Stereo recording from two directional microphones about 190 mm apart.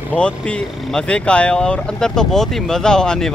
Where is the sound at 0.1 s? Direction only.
5° left (ahead or behind).